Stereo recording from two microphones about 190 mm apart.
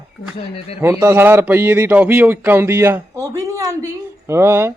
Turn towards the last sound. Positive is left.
turn(degrees=-15)  # may be behind; listen again after turning